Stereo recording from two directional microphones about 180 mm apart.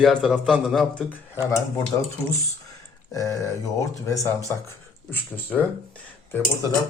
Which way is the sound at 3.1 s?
20° left (ahead or behind).